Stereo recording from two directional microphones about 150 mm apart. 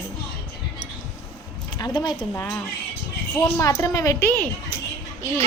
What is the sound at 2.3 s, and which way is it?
A woman's voice, 15° left (ahead or behind).